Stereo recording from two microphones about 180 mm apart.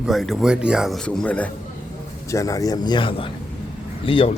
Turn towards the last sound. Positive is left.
turn(degrees=30)  # may be behind; listen again after turning